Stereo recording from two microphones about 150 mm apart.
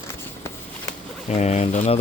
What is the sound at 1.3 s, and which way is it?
Speech, 50° left (ahead or behind).